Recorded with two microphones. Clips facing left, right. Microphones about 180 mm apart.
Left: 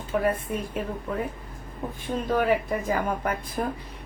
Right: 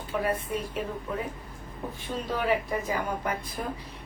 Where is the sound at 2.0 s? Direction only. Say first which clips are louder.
Left 5 dB; 50° left (ahead or behind).